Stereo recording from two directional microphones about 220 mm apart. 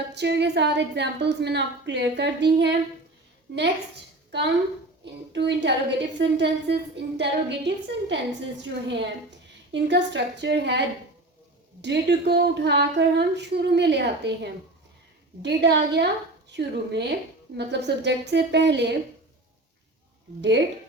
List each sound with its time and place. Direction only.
0.1 s a woman's voice: 50° right (ahead or behind)
5.0 s a woman's voice: 50° right (ahead or behind)
20.4 s a woman's voice: 55° right (ahead or behind)